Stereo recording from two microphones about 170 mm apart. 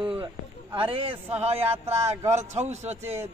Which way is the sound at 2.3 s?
40° right (ahead or behind).